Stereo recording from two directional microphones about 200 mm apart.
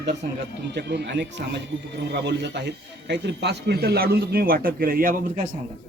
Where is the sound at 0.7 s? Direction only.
55° right (ahead or behind).